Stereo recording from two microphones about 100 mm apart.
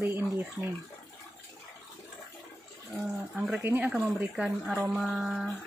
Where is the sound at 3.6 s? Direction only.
20° right (ahead or behind).